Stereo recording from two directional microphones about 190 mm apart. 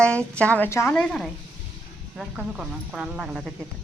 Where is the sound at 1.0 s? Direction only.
Centre (ahead or behind).